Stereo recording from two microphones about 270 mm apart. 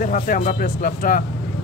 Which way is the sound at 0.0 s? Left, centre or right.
Left.